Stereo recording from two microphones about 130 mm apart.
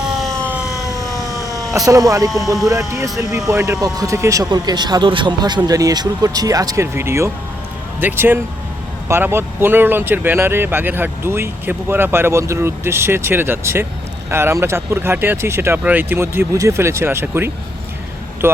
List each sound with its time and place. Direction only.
0.2 s siren: centre (ahead or behind)
0.6 s siren: 25° left (ahead or behind)
1.7 s speech: 25° right (ahead or behind)